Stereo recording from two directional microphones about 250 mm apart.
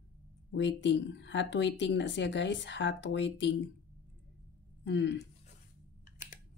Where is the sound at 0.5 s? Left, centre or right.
Left.